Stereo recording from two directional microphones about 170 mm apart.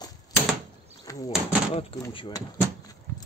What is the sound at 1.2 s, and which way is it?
Speech, 35° left (ahead or behind).